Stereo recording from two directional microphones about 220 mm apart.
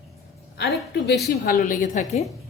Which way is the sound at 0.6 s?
50° left (ahead or behind).